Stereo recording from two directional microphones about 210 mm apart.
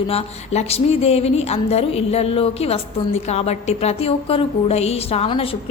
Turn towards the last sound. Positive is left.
turn(degrees=25)  # may be behind; listen again after turning